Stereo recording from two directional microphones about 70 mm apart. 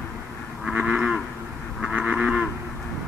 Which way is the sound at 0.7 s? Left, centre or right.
Centre.